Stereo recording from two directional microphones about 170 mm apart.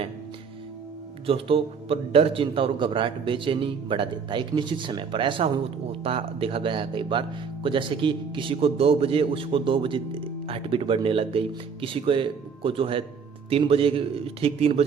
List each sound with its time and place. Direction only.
1.3 s a man's voice: 35° right (ahead or behind)